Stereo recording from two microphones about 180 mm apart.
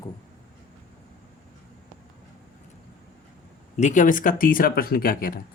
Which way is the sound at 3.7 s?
40° left (ahead or behind).